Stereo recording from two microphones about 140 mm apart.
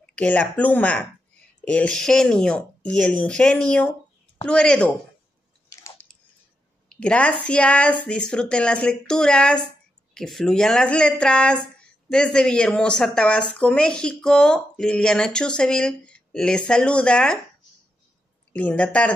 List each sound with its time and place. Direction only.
0.0 s speech: 10° left (ahead or behind)
5.7 s squish: 20° left (ahead or behind)
6.9 s speech: 10° left (ahead or behind)
18.5 s speech: 10° left (ahead or behind)